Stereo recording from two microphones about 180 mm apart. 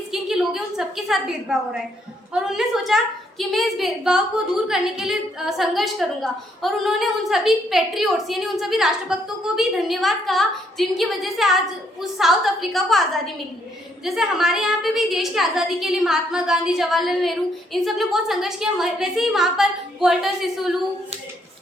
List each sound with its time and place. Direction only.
0.1 s a woman's voice: centre (ahead or behind)